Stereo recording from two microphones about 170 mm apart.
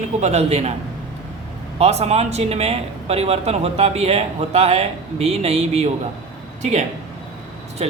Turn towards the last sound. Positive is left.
turn(degrees=-35)  # may be behind; listen again after turning